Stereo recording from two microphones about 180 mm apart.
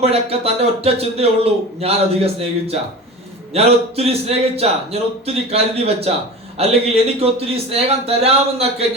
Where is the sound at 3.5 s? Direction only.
35° right (ahead or behind).